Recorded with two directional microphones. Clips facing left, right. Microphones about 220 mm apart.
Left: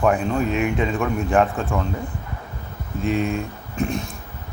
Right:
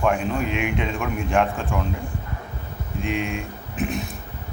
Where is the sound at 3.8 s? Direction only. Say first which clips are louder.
Left 2 dB; 5° right (ahead or behind).